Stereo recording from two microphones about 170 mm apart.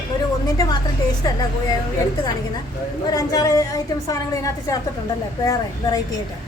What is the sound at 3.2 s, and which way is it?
A woman's voice, 20° left (ahead or behind).